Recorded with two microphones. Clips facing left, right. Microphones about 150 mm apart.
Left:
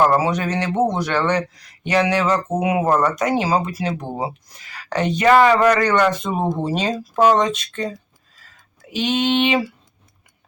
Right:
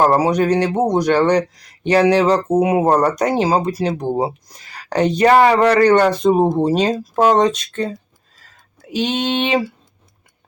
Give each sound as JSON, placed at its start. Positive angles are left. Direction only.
{"t": 0.0, "sound": "speech", "side_deg": -35}
{"t": 0.6, "sound": "speech", "side_deg": -15}
{"t": 1.2, "sound": "speech", "side_deg": -40}
{"t": 9.0, "sound": "speech", "side_deg": -45}